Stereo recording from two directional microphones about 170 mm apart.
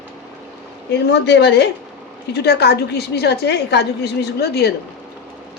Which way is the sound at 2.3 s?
75° left (ahead or behind).